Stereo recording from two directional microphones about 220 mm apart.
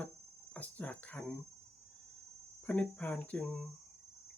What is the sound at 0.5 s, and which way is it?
Speech, 5° left (ahead or behind).